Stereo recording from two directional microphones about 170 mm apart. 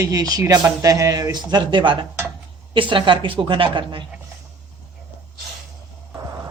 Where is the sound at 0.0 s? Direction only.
20° right (ahead or behind).